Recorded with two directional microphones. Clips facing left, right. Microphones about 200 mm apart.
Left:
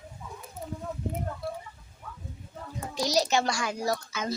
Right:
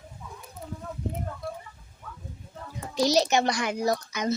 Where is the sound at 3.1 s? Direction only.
20° right (ahead or behind).